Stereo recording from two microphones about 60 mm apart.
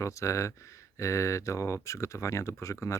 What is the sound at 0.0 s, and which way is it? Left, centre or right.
Speech, left.